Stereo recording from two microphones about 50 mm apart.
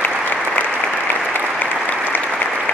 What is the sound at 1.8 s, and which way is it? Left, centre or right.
Applause, left.